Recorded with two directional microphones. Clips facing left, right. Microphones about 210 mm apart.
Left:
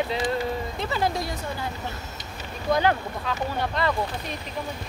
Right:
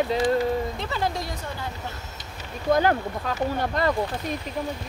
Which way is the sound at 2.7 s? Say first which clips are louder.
Right 2 dB; 45° right (ahead or behind).